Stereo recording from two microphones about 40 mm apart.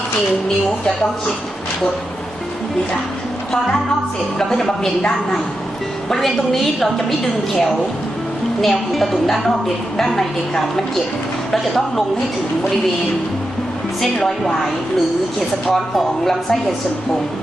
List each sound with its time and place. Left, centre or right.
4.4 s a woman's voice: centre
8.6 s a woman's voice: centre
14.3 s a woman's voice: centre
15.7 s a woman's voice: centre